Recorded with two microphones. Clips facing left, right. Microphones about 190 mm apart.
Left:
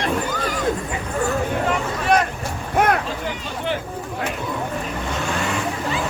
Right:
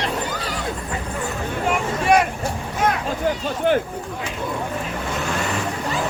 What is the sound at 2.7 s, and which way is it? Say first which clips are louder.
Vehicle: left 4 dB; 60° left (ahead or behind).